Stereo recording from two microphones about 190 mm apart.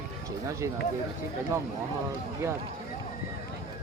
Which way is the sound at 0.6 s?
15° right (ahead or behind).